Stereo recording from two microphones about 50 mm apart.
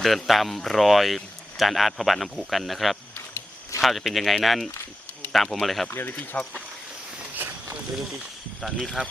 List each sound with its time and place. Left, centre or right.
0.0 s speech: centre
5.9 s speech: left
6.3 s speech: centre
7.3 s a sound: right
8.6 s speech: centre
9.0 s speech: right